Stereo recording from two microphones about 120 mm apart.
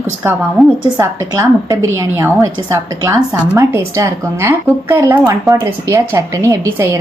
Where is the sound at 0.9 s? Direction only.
25° right (ahead or behind).